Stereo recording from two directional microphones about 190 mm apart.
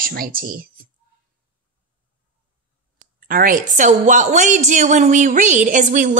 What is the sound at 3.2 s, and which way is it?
A woman's voice, 50° right (ahead or behind).